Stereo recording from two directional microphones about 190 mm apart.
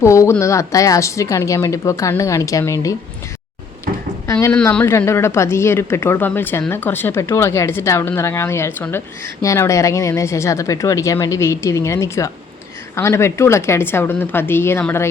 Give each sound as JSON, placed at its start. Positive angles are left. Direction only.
{"t": 0.0, "sound": "a woman's voice", "side_deg": 15}
{"t": 4.3, "sound": "a woman's voice", "side_deg": 15}